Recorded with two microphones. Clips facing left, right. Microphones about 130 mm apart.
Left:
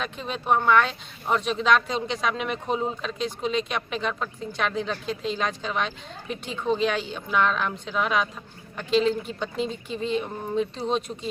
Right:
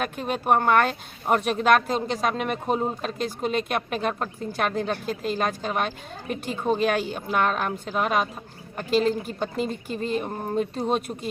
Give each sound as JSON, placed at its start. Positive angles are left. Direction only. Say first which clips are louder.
{"t": 0.0, "sound": "a woman's voice", "louder": "right 4 dB", "side_deg": -50}